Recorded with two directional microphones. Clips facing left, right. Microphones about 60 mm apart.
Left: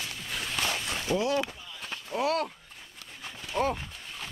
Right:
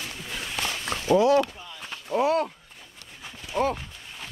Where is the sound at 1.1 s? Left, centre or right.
Right.